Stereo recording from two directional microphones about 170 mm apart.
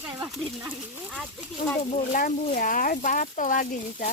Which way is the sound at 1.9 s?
40° left (ahead or behind).